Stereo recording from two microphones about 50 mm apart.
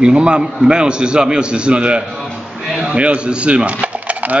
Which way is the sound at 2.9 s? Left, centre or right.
Right.